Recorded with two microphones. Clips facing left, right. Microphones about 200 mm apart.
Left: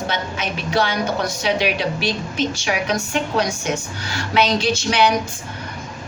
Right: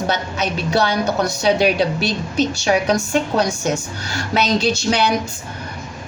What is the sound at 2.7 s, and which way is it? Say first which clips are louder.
A woman's voice: right 5 dB; 35° right (ahead or behind).